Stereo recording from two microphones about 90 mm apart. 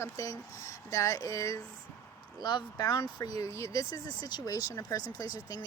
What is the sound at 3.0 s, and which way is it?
Speech, 35° left (ahead or behind).